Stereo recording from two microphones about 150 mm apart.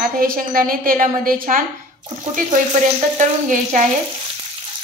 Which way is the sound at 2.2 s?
55° right (ahead or behind).